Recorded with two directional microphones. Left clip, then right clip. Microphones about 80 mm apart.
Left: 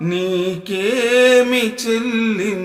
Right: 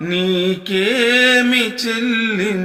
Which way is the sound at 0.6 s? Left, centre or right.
Left.